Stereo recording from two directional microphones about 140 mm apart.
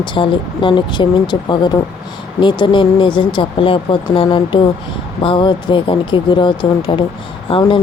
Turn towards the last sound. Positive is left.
turn(degrees=40)  # may be behind; listen again after turning